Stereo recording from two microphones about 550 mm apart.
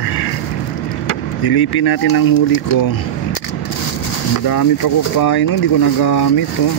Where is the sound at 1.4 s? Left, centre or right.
Left.